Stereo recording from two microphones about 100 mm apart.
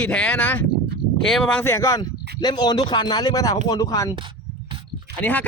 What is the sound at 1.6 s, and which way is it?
Speech, 30° left (ahead or behind).